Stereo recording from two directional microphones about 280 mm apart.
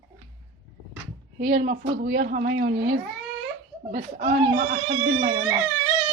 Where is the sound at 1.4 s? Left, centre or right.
Right.